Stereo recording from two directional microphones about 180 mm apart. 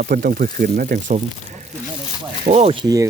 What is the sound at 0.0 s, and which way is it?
Speech, 55° right (ahead or behind).